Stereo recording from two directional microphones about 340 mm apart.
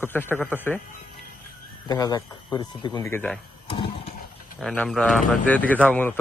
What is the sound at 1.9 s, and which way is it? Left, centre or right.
Speech, centre.